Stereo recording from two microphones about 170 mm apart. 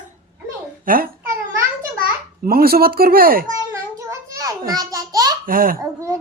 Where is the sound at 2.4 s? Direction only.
60° right (ahead or behind).